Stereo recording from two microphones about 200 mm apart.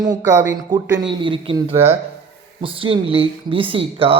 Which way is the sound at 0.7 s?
20° right (ahead or behind).